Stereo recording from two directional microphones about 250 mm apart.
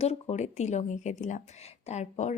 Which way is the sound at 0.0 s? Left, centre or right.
Left.